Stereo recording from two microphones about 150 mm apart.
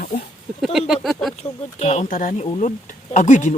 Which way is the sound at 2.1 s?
65° left (ahead or behind).